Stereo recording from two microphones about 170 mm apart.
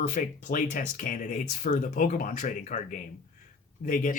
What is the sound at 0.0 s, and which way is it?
Speech, 50° left (ahead or behind).